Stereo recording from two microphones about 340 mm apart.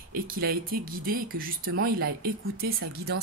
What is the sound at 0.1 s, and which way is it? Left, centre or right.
Speech, right.